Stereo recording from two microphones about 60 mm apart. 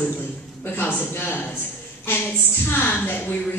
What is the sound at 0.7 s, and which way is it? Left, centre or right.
Speech, left.